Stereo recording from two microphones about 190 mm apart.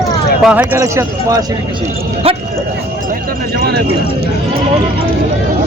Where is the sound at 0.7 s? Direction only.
15° right (ahead or behind).